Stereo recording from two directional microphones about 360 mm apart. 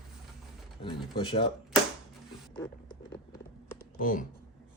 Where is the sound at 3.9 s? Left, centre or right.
Left.